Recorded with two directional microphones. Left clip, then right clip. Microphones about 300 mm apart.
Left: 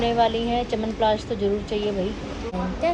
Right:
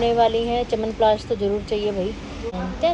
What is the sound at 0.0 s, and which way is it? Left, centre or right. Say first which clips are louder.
Speech: right 3 dB; centre.